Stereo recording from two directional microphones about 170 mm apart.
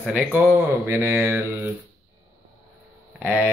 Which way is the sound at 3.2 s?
10° right (ahead or behind).